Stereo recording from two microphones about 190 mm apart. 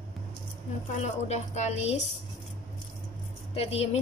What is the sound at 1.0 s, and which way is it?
A woman's voice, 35° left (ahead or behind).